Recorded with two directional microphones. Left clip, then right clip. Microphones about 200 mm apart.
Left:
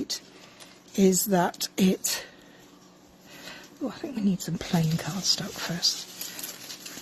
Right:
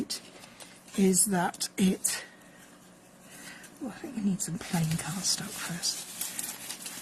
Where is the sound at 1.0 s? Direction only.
45° left (ahead or behind).